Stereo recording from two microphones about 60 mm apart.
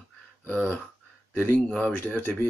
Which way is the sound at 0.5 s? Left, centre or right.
Left.